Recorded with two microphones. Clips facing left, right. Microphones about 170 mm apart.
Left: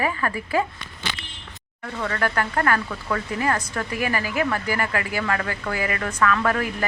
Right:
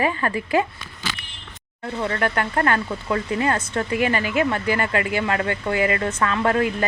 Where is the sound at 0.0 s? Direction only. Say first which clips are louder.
Right 3 dB; 25° right (ahead or behind).